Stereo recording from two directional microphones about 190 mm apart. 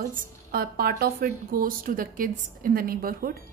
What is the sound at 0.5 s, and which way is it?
A woman's voice, 50° right (ahead or behind).